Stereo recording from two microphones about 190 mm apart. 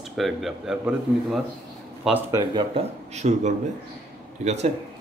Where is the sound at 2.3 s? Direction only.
25° right (ahead or behind).